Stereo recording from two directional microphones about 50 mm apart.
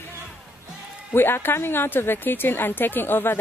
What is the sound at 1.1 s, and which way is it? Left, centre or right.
A woman's voice, left.